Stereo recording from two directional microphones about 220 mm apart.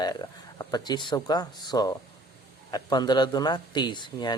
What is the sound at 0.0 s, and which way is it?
Speech, 20° left (ahead or behind).